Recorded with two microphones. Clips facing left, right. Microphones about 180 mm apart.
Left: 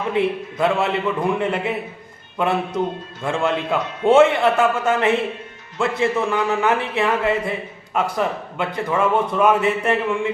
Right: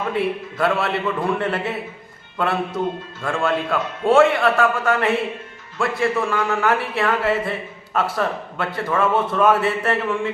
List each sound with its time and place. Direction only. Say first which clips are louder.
0.1 s a man's voice: left 2 dB; 20° left (ahead or behind)